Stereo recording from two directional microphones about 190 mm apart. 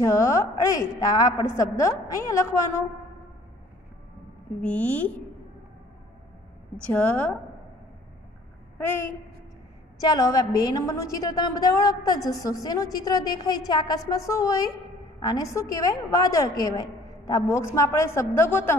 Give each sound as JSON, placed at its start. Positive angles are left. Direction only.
{"t": 0.0, "sound": "a woman's voice", "side_deg": 15}
{"t": 4.6, "sound": "a woman's voice", "side_deg": 5}
{"t": 6.9, "sound": "a woman's voice", "side_deg": 10}
{"t": 9.9, "sound": "a woman's voice", "side_deg": 20}